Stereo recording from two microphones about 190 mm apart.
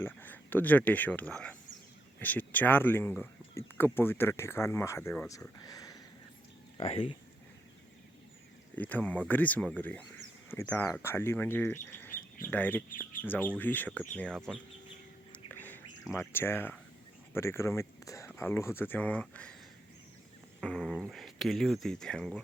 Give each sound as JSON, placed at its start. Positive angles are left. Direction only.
{"t": 0.0, "sound": "speech", "side_deg": 10}
{"t": 6.7, "sound": "speech", "side_deg": 30}
{"t": 8.7, "sound": "speech", "side_deg": 10}
{"t": 16.1, "sound": "speech", "side_deg": 10}
{"t": 20.6, "sound": "dog", "side_deg": 5}
{"t": 21.1, "sound": "speech", "side_deg": 0}